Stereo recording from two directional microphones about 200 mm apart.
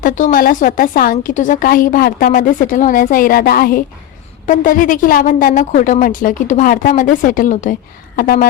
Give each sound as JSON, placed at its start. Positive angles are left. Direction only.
{"t": 0.0, "sound": "a woman's voice", "side_deg": 40}